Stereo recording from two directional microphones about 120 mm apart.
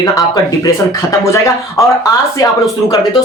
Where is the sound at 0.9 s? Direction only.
25° left (ahead or behind).